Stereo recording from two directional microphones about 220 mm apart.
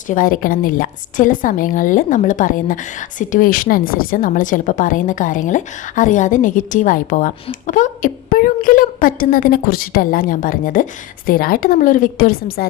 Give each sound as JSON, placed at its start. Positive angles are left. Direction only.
{"t": 0.1, "sound": "a woman's voice", "side_deg": 40}